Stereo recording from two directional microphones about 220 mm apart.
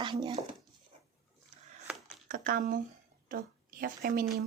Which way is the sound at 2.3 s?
35° right (ahead or behind).